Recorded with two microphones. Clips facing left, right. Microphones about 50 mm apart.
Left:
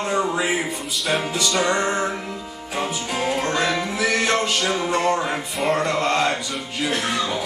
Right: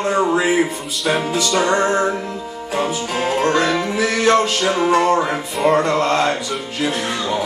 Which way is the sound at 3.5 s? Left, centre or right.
Centre.